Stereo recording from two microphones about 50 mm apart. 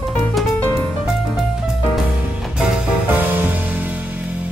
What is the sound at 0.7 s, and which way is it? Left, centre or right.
Music, centre.